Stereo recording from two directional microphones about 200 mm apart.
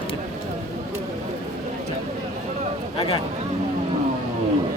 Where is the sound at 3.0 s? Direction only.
25° left (ahead or behind).